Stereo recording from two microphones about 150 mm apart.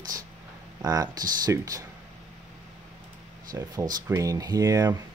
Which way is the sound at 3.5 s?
15° right (ahead or behind).